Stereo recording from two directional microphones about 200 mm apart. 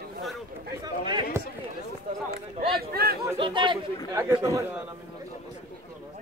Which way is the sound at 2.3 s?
50° right (ahead or behind).